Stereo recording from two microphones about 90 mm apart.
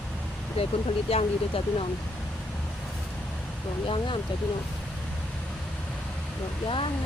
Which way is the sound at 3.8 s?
70° left (ahead or behind).